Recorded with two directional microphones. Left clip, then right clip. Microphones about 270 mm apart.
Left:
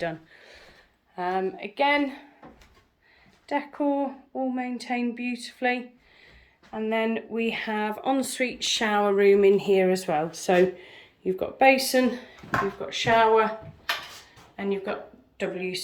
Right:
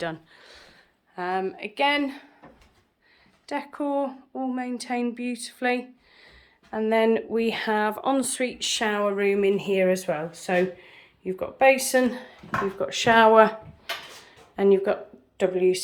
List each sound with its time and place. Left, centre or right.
0.1 s speech: centre
3.5 s speech: centre
7.0 s speech: right
12.8 s speech: right